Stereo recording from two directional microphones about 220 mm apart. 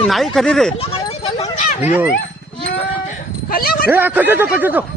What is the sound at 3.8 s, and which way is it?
Speech, 10° right (ahead or behind).